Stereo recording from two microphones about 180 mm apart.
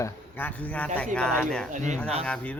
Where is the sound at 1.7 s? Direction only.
45° right (ahead or behind).